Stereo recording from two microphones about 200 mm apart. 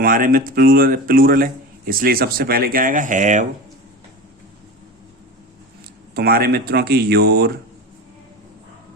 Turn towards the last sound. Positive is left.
turn(degrees=-55)  # may be behind; listen again after turning